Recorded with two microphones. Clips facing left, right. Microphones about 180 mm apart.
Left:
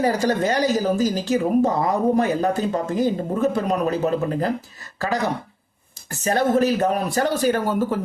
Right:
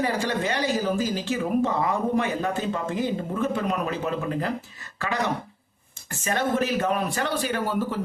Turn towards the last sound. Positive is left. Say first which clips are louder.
# left 6 dB
turn(degrees=45)  # may be behind; listen again after turning